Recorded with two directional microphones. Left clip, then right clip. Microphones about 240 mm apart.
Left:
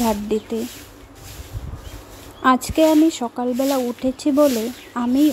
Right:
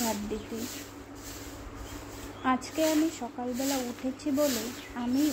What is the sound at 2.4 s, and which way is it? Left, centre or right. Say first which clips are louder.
Speech: left 12 dB; left.